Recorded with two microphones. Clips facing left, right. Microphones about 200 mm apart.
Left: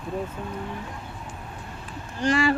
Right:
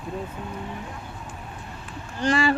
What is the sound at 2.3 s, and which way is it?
Speech, 30° right (ahead or behind).